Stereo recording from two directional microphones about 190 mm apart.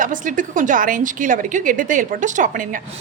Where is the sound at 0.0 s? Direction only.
45° right (ahead or behind).